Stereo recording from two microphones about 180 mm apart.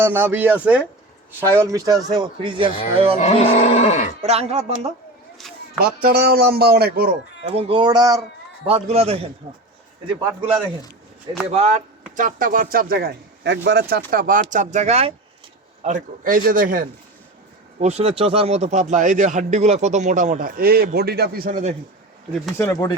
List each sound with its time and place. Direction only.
0.0 s speech: 10° right (ahead or behind); by 3.2 s 30° right (ahead or behind)
3.2 s speech: 40° left (ahead or behind)
4.2 s a man's voice: 35° right (ahead or behind)
5.8 s speech: 60° right (ahead or behind)
7.4 s speech: 30° right (ahead or behind)
8.9 s a man's voice: 35° right (ahead or behind)
10.2 s speech: 10° right (ahead or behind)
11.5 s a man's voice: 35° right (ahead or behind)
17.7 s a man's voice: 35° right (ahead or behind); by 21.6 s 55° right (ahead or behind)
22.5 s speech: 15° left (ahead or behind)